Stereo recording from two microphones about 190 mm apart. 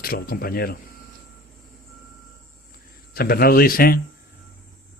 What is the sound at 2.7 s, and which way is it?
Speech, 50° left (ahead or behind).